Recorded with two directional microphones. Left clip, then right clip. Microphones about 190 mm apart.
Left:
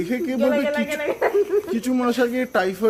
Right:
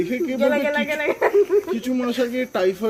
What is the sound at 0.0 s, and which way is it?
Speech, 20° left (ahead or behind).